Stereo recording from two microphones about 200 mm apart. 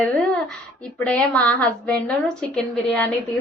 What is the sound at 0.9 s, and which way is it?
A woman's voice, 5° left (ahead or behind).